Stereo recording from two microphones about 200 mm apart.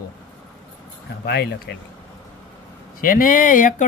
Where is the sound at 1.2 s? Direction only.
55° left (ahead or behind).